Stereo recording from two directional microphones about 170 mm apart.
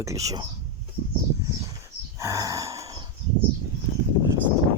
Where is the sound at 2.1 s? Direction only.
20° right (ahead or behind).